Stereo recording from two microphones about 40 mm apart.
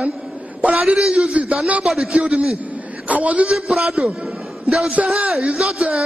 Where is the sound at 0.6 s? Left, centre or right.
Right.